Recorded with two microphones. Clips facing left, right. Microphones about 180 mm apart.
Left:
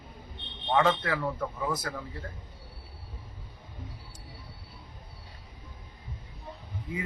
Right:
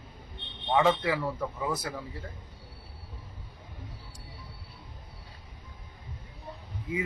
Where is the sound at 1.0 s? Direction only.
5° right (ahead or behind).